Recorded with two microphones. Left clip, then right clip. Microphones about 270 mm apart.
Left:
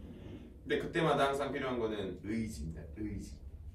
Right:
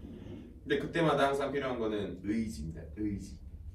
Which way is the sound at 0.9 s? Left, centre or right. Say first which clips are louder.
Right 2 dB; centre.